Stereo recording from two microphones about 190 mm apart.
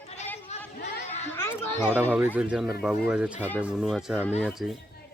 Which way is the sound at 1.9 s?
10° right (ahead or behind).